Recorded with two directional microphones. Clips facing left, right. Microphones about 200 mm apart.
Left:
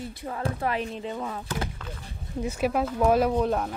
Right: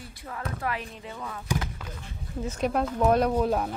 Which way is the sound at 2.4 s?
10° left (ahead or behind).